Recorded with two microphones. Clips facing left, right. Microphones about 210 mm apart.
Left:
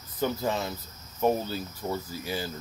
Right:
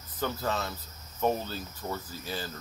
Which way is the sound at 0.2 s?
15° left (ahead or behind).